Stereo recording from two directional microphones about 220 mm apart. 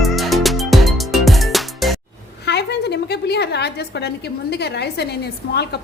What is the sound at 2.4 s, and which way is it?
A woman's voice, 50° left (ahead or behind).